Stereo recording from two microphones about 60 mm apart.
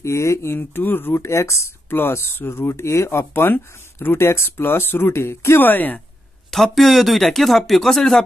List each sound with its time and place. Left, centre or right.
0.0 s speech: left
0.6 s speech: left
1.2 s speech: left
1.9 s speech: left
4.2 s speech: left
5.6 s speech: left
6.5 s speech: centre